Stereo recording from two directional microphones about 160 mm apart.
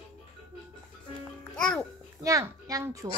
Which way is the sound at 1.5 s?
5° left (ahead or behind).